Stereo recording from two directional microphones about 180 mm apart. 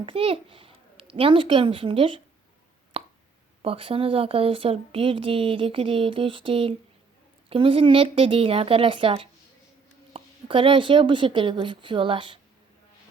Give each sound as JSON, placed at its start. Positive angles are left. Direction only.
{"t": 0.0, "sound": "a child's voice", "side_deg": -30}
{"t": 2.9, "sound": "plop", "side_deg": -30}
{"t": 3.6, "sound": "a woman's voice", "side_deg": -30}